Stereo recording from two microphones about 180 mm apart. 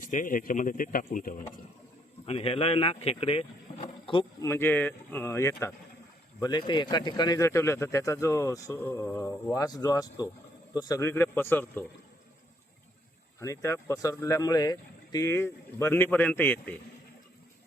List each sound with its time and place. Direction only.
0.0 s speech: 45° left (ahead or behind)
2.2 s speech: 35° left (ahead or behind)
3.7 s rowboat: 35° left (ahead or behind)
4.0 s speech: 25° left (ahead or behind)
4.4 s speech: 10° left (ahead or behind)
13.4 s speech: 15° left (ahead or behind)